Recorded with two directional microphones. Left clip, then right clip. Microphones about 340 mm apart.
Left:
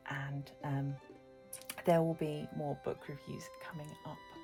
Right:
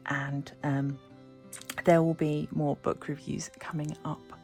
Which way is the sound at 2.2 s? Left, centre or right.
Right.